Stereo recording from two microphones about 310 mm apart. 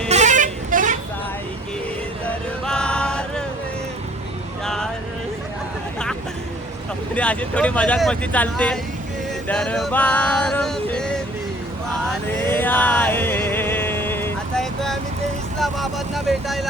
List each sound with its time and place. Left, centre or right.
0.1 s bus: right
2.6 s music: centre
4.6 s a sound: centre
7.2 s speech: centre
9.5 s music: centre
15.5 s vehicle: centre